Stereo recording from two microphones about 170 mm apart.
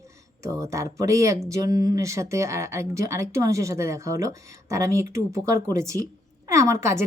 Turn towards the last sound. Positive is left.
turn(degrees=-15)  # may be behind; listen again after turning